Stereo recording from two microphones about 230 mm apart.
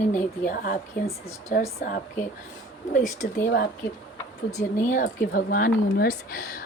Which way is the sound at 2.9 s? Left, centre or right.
Left.